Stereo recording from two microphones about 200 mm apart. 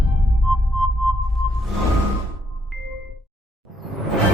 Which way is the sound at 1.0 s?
Centre (ahead or behind).